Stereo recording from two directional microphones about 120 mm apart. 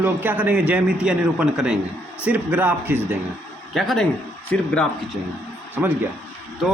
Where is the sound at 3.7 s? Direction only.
5° left (ahead or behind).